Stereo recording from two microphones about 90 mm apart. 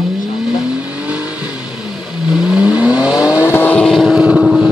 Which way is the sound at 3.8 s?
5° left (ahead or behind).